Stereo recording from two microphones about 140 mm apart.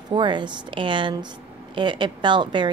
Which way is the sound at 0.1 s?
35° right (ahead or behind).